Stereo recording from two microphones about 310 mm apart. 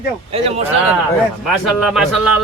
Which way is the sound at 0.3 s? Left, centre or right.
Centre.